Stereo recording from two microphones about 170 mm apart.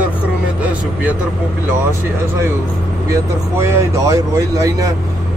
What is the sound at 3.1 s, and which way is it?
Speech, 15° right (ahead or behind).